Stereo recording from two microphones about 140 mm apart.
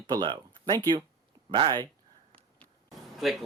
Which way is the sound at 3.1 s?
Centre (ahead or behind).